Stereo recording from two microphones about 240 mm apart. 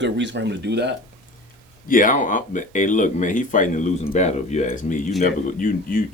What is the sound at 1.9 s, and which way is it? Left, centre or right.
Speech, left.